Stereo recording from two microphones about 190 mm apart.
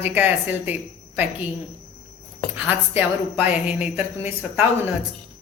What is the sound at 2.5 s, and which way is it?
A woman's voice, 10° right (ahead or behind).